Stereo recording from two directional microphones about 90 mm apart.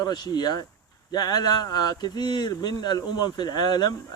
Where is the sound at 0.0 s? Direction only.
50° left (ahead or behind).